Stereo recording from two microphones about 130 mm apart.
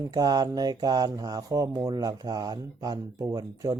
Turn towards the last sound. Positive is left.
turn(degrees=-30)  # may be behind; listen again after turning